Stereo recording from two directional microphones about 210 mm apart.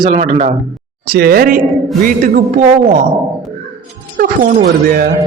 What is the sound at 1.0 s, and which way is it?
A man's voice, 45° right (ahead or behind).